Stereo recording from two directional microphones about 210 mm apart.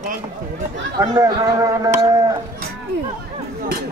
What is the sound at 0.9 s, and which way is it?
Speech, 15° right (ahead or behind).